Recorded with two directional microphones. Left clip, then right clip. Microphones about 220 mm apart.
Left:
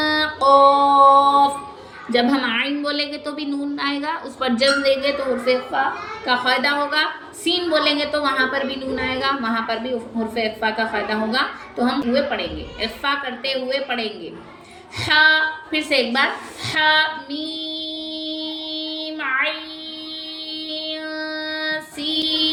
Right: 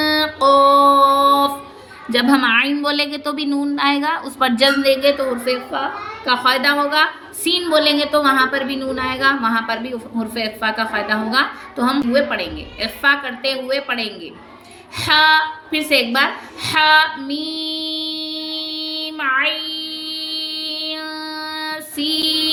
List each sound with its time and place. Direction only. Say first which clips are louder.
0.0 s music: right 2 dB; 55° right (ahead or behind)
2.0 s a woman's voice: right 4 dB; 55° right (ahead or behind)
14.9 s a sound: right 2 dB; 55° right (ahead or behind)